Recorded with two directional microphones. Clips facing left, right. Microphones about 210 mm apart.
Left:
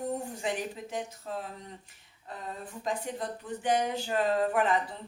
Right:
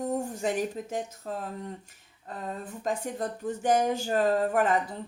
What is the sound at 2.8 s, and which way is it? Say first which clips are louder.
A woman's voice: right 3 dB; 45° right (ahead or behind).